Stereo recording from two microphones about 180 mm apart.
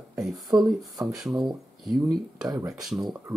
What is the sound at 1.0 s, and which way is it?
Speech, centre (ahead or behind).